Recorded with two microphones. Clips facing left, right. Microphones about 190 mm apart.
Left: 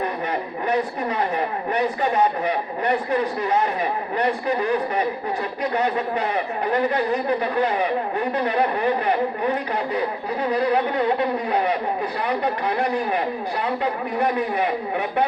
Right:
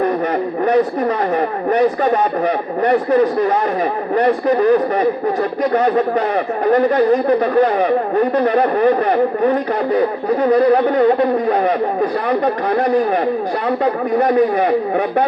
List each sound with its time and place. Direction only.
1.4 s a man's voice: 45° right (ahead or behind)